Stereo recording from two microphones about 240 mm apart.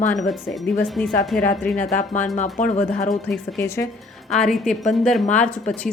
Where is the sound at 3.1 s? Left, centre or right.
Centre.